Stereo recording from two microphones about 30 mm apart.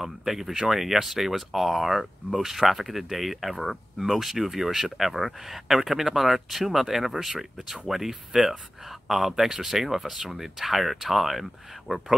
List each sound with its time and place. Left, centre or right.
0.0 s speech: centre